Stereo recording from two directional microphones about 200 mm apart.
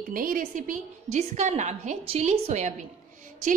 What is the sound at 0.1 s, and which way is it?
A woman's voice, 45° right (ahead or behind).